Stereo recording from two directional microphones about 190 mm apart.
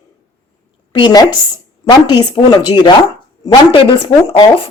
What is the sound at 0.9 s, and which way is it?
A woman's voice, 25° left (ahead or behind).